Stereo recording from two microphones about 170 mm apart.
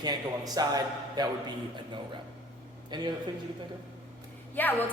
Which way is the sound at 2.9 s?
25° right (ahead or behind).